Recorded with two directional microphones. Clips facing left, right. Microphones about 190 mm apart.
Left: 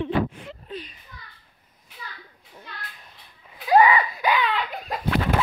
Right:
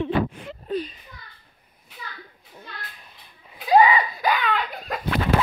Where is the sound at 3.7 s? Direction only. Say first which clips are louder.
Even; 25° right (ahead or behind).